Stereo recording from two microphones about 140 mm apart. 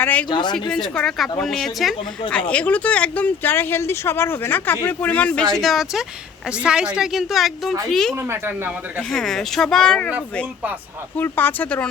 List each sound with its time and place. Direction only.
0.0 s speech: 10° left (ahead or behind)
0.3 s speech: 35° left (ahead or behind)
0.7 s speech: 5° left (ahead or behind)
8.1 s speech: 15° right (ahead or behind)
9.0 s speech: 5° left (ahead or behind)
11.2 s speech: 15° left (ahead or behind)